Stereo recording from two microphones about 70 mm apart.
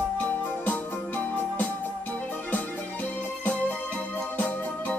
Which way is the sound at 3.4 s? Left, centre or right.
Left.